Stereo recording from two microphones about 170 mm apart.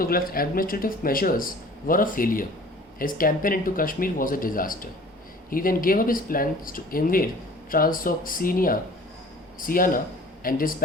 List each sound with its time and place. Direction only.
0.0 s a man's voice: 60° left (ahead or behind)